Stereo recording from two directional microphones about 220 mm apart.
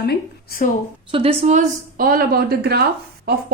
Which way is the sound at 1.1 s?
25° right (ahead or behind).